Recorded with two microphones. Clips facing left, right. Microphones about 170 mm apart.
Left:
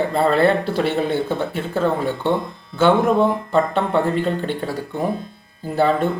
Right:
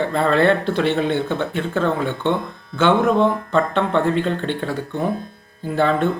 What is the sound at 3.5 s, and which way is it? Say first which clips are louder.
Speech: even; 10° left (ahead or behind).